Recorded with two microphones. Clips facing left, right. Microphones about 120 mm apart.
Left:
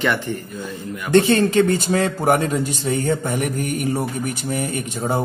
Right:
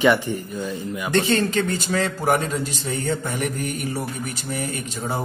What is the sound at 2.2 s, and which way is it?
Speech, 55° left (ahead or behind).